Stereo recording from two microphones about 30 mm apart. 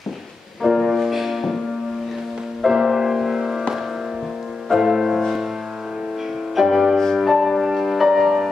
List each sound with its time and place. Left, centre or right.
0.8 s music: centre
2.6 s music: centre
4.6 s music: centre
6.5 s music: centre